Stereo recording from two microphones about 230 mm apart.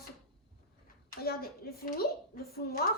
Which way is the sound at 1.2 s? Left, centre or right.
Left.